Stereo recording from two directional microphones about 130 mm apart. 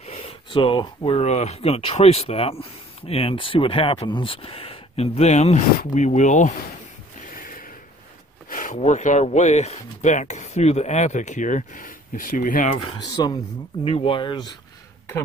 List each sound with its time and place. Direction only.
0.0 s a sound: 50° left (ahead or behind)
1.2 s speech: 60° left (ahead or behind)
7.2 s a sound: 90° left
8.7 s speech: 65° left (ahead or behind); by 12.6 s 90° left
12.7 s speech: 40° left (ahead or behind)
13.8 s speech: 45° left (ahead or behind)